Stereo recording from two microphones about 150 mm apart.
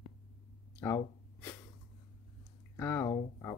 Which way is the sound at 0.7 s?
20° left (ahead or behind).